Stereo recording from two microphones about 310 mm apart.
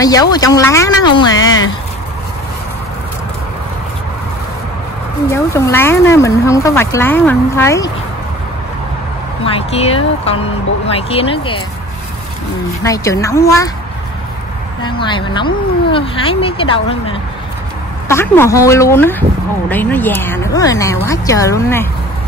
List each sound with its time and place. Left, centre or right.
0.0 s speech: centre
5.3 s speech: centre
9.4 s speech: centre
12.8 s speech: centre
14.8 s speech: centre